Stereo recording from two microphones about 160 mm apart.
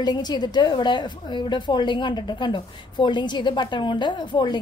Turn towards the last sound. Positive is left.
turn(degrees=30)  # may be behind; listen again after turning